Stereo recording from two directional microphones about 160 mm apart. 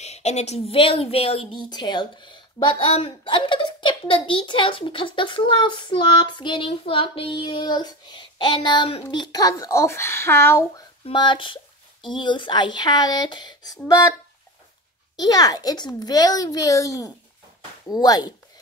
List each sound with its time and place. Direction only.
0.0 s a child's voice: 45° left (ahead or behind); by 10.6 s 15° left (ahead or behind)
11.1 s a child's voice: 30° left (ahead or behind)
15.1 s a child's voice: 25° left (ahead or behind)